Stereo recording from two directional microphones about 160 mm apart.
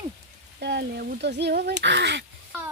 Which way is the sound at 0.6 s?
90° right.